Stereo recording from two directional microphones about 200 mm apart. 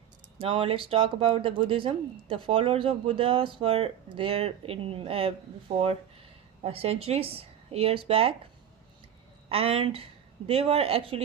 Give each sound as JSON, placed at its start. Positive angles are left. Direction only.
{"t": 0.3, "sound": "speech", "side_deg": -25}
{"t": 9.5, "sound": "speech", "side_deg": -30}